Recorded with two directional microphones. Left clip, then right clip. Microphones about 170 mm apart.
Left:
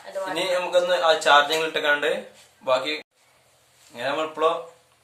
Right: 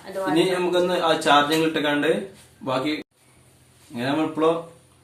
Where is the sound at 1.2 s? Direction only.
25° left (ahead or behind).